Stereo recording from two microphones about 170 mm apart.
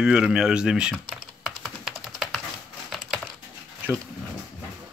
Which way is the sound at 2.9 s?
Centre (ahead or behind).